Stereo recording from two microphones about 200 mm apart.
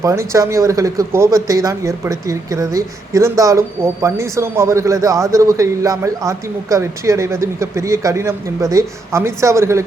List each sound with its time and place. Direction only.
0.0 s a man's voice: 15° right (ahead or behind)